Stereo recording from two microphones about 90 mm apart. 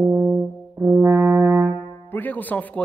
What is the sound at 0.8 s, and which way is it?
Brass instrument, 25° right (ahead or behind).